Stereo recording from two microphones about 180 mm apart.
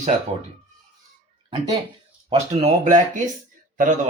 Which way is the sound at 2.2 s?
40° right (ahead or behind).